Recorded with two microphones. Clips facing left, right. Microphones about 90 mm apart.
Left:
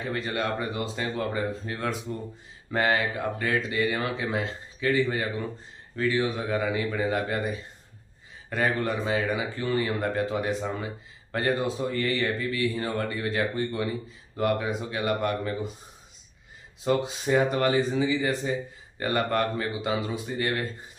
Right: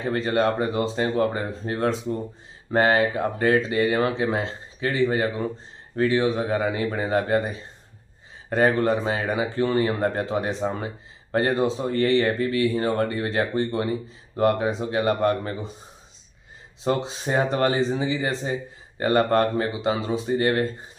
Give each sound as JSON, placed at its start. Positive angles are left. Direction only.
{"t": 0.1, "sound": "speech", "side_deg": -35}
{"t": 16.8, "sound": "speech", "side_deg": -35}